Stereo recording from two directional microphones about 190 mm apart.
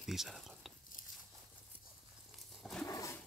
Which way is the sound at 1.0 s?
45° left (ahead or behind).